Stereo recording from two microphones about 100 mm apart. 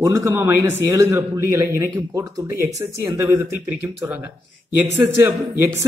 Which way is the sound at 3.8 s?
20° right (ahead or behind).